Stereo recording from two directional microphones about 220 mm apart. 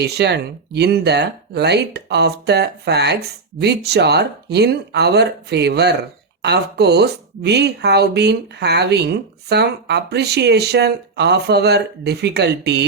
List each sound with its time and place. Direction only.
0.0 s speech: 50° right (ahead or behind)